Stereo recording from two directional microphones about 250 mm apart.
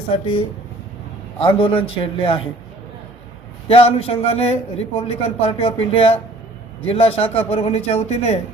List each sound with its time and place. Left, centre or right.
1.4 s a man's voice: left
3.7 s a man's voice: left